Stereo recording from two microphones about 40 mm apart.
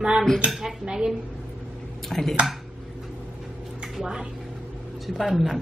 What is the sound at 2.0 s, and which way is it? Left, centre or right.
Speech, centre.